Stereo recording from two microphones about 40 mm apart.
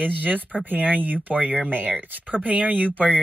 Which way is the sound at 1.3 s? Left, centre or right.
Right.